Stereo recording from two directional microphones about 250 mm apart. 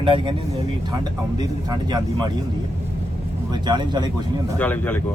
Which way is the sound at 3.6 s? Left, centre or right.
Centre.